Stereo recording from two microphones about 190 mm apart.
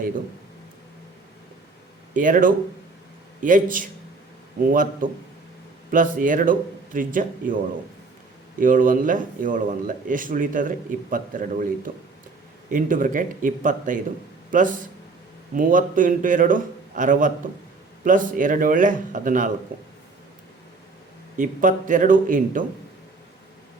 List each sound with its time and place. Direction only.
2.1 s speech: 45° right (ahead or behind)
8.5 s speech: 45° right (ahead or behind)
12.7 s speech: 45° right (ahead or behind)
21.3 s speech: 45° right (ahead or behind)